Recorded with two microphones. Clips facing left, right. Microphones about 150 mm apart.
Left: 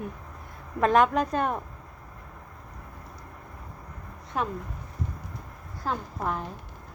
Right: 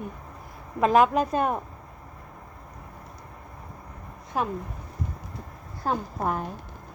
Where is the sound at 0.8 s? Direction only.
5° right (ahead or behind).